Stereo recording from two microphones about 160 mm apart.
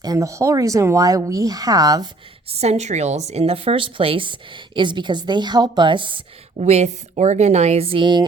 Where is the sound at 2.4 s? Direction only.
40° right (ahead or behind).